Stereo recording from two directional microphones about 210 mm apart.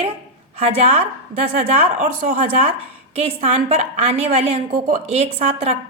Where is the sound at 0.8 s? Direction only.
30° right (ahead or behind).